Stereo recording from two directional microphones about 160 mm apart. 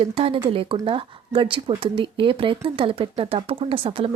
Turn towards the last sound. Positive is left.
turn(degrees=-35)  # may be behind; listen again after turning